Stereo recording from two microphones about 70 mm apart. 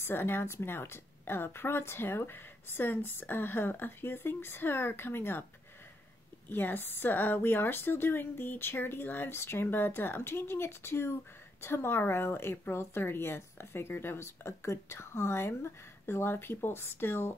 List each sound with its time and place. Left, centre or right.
0.0 s a woman's voice: left
6.5 s a woman's voice: left